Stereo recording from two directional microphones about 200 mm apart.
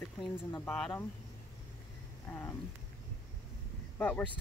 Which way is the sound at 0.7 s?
Centre (ahead or behind).